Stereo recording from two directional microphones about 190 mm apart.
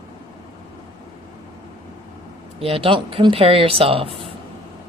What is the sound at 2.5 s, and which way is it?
Speech, 30° right (ahead or behind).